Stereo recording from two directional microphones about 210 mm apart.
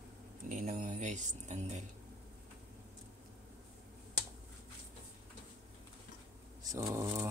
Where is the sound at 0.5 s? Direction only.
40° right (ahead or behind).